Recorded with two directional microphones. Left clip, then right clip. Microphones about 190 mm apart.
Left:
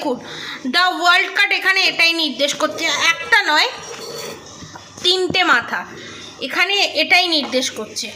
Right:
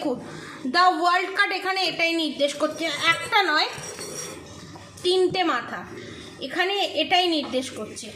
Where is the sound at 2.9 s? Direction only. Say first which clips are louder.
Left 7 dB; 25° left (ahead or behind).